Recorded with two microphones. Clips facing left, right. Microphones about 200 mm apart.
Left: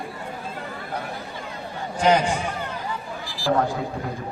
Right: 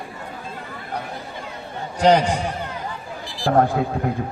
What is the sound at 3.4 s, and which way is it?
Speech, 55° right (ahead or behind).